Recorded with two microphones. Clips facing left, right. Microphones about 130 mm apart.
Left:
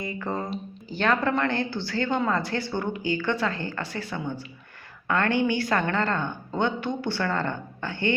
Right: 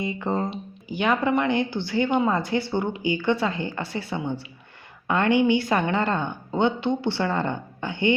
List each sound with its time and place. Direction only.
0.0 s speech: 20° right (ahead or behind)